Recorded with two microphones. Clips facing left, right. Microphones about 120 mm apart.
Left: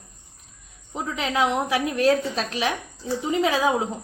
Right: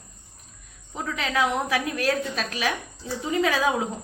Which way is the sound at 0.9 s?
20° left (ahead or behind).